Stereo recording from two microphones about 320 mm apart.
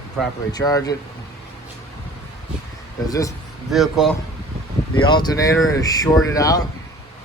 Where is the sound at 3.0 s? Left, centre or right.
Centre.